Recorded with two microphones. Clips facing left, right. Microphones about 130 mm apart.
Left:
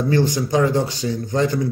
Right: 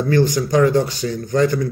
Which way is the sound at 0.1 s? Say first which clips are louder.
Right 3 dB; 25° left (ahead or behind).